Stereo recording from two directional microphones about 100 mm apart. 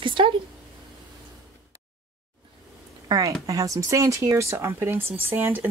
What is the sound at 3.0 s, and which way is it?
Speech, 35° right (ahead or behind).